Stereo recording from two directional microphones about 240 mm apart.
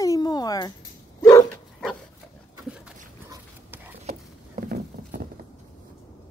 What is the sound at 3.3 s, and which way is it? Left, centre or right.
Dog, centre.